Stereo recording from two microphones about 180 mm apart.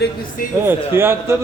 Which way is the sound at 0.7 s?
15° right (ahead or behind).